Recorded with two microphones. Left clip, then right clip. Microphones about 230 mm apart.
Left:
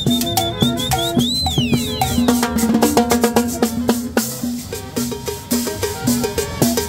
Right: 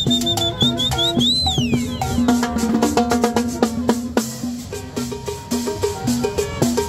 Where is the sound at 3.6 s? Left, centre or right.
Left.